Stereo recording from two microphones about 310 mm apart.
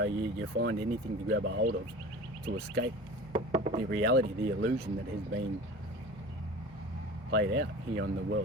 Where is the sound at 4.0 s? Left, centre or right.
Right.